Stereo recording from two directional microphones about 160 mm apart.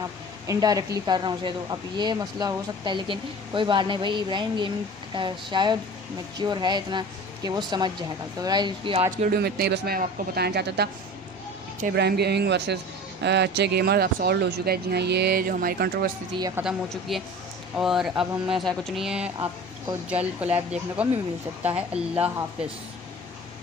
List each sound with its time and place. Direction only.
0.5 s a woman's voice: 25° right (ahead or behind)
9.1 s speech: 60° right (ahead or behind); by 10.9 s 90° right
11.9 s speech: 90° right; by 16.1 s 70° right (ahead or behind)
16.3 s a woman's voice: 20° right (ahead or behind)
16.6 s speech: centre (ahead or behind)
20.4 s speech: 40° right (ahead or behind)
21.9 s speech: 10° right (ahead or behind)